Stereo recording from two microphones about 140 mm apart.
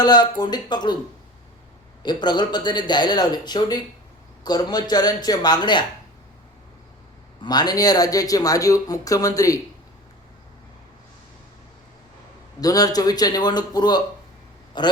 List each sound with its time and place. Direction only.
0.0 s speech: 30° left (ahead or behind)
2.0 s speech: 30° left (ahead or behind)
7.4 s speech: 30° left (ahead or behind)
12.5 s speech: 25° left (ahead or behind)